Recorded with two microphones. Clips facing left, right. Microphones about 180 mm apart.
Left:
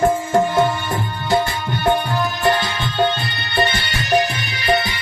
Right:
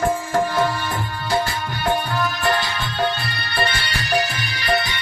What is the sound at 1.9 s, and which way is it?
Music, 25° left (ahead or behind).